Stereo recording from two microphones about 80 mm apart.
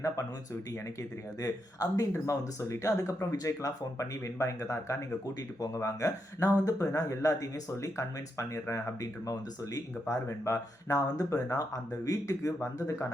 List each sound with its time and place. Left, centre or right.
1.4 s speech: left